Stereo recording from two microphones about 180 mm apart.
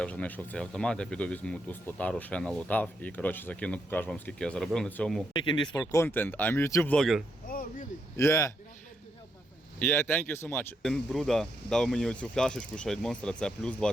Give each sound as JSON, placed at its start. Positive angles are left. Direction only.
{"t": 0.0, "sound": "speech", "side_deg": 5}
{"t": 5.3, "sound": "speech", "side_deg": 25}
{"t": 6.9, "sound": "speech", "side_deg": 0}
{"t": 7.4, "sound": "a sound", "side_deg": 50}
{"t": 8.1, "sound": "speech", "side_deg": 15}
{"t": 9.8, "sound": "speech", "side_deg": 10}
{"t": 10.8, "sound": "speech", "side_deg": 5}